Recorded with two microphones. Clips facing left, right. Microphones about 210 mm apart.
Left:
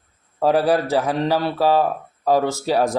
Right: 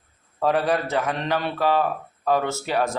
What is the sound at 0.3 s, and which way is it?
Speech, 30° left (ahead or behind).